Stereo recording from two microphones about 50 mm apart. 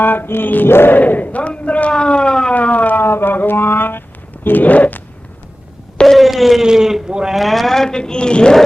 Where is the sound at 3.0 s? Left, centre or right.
Left.